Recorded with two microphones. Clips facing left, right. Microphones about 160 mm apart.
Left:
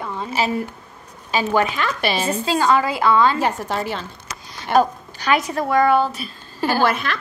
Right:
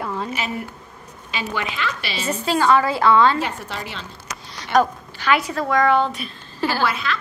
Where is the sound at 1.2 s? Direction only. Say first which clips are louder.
Left 8 dB; 40° left (ahead or behind).